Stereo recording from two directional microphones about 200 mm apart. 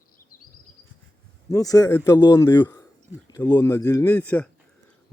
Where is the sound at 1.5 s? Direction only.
15° left (ahead or behind).